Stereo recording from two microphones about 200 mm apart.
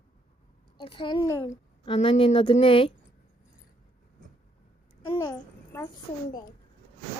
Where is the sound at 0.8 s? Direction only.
25° left (ahead or behind).